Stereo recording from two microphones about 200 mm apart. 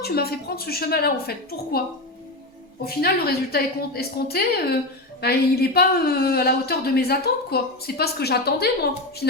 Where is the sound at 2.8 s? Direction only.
50° left (ahead or behind).